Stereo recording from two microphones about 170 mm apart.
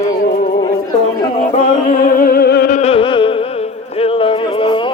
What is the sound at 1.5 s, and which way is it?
Music, 55° left (ahead or behind).